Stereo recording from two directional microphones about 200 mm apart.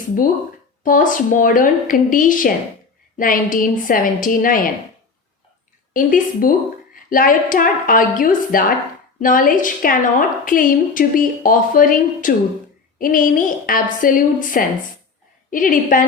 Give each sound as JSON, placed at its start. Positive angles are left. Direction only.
{"t": 0.9, "sound": "a woman's voice", "side_deg": 40}
{"t": 5.9, "sound": "a woman's voice", "side_deg": 45}